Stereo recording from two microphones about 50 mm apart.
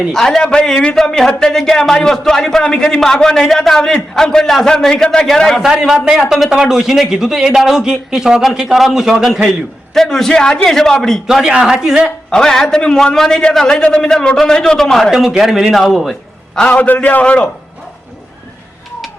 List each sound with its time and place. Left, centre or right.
0.1 s a man's voice: centre
6.1 s a man's voice: centre
9.9 s a man's voice: centre
11.4 s a man's voice: centre
12.3 s a man's voice: centre
15.1 s a man's voice: centre
16.6 s a man's voice: left